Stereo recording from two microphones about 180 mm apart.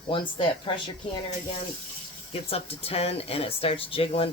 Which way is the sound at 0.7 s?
30° left (ahead or behind).